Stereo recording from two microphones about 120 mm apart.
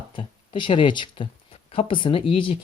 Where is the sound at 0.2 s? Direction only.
45° left (ahead or behind).